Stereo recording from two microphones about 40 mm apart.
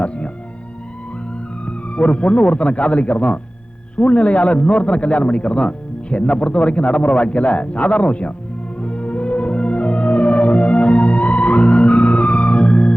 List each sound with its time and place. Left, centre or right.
1.6 s a man's voice: left
8.8 s music: left